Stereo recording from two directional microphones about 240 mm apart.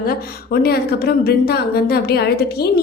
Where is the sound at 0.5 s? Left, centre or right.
Left.